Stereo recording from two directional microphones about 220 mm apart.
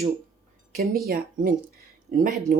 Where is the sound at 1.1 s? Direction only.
40° right (ahead or behind).